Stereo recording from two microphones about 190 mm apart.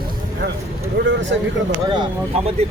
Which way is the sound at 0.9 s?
70° right (ahead or behind).